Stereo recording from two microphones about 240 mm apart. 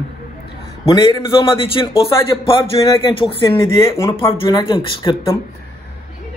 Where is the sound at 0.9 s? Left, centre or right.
Centre.